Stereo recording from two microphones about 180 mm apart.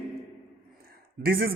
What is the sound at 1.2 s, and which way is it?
Speech, 55° right (ahead or behind).